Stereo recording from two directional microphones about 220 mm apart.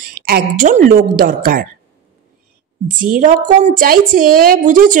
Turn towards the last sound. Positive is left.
turn(degrees=-35)  # may be behind; listen again after turning